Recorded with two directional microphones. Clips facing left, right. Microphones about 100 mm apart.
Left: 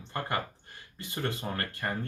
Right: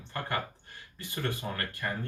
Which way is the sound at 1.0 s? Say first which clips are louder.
Left 1 dB; 20° left (ahead or behind).